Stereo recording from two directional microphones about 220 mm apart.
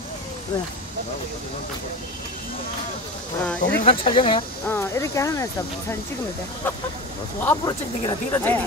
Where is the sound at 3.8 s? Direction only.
25° left (ahead or behind).